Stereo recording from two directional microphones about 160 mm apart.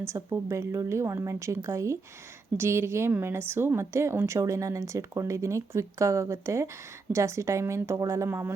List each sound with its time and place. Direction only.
0.0 s speech: 15° right (ahead or behind)